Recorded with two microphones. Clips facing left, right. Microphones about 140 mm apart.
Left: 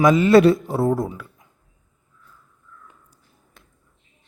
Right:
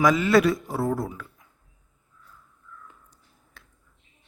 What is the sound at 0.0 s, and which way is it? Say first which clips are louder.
A man's voice: left 6 dB; 25° left (ahead or behind).